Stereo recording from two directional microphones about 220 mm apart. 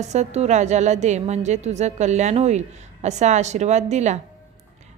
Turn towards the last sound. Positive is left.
turn(degrees=-30)  # may be behind; listen again after turning